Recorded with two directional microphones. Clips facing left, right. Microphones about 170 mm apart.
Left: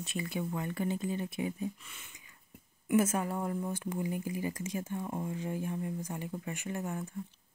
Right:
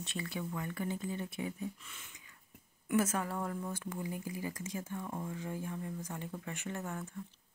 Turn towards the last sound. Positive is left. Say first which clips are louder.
# left 3 dB
turn(degrees=15)  # may be behind; listen again after turning